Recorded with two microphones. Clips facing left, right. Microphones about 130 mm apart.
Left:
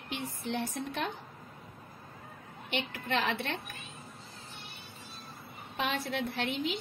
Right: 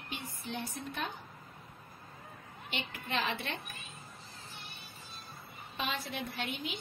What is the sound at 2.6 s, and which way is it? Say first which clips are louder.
Speech: left 5 dB; 65° left (ahead or behind).